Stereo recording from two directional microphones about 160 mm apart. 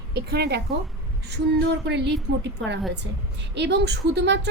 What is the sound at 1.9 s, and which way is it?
A woman's voice, 90° right.